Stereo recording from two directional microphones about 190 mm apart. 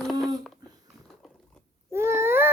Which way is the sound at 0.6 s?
20° right (ahead or behind).